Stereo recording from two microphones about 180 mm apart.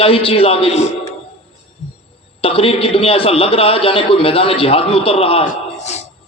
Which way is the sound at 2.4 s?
30° left (ahead or behind).